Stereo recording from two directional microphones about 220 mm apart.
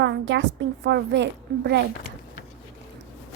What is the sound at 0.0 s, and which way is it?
A woman's voice, 55° right (ahead or behind).